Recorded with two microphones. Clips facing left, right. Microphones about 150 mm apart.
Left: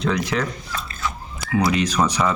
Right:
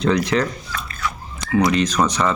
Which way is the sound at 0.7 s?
25° left (ahead or behind).